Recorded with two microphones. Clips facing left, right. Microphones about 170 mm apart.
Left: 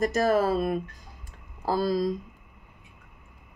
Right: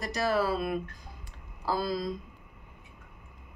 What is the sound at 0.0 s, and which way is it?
Speech, 45° left (ahead or behind).